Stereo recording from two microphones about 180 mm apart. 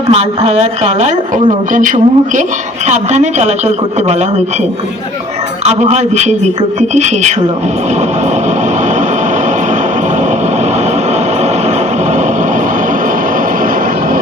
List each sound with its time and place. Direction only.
0.1 s speech: 35° right (ahead or behind)
5.6 s speech: 40° right (ahead or behind)